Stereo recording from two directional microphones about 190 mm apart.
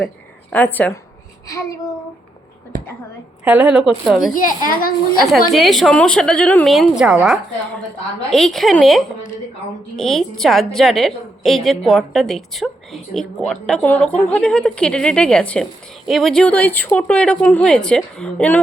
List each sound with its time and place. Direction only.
0.5 s a woman's voice: 10° left (ahead or behind)
2.7 s a woman's voice: 45° right (ahead or behind)
3.4 s a woman's voice: 5° right (ahead or behind)
4.4 s a woman's voice: 45° left (ahead or behind)
5.5 s a woman's voice: centre (ahead or behind)
6.7 s a woman's voice: 5° right (ahead or behind)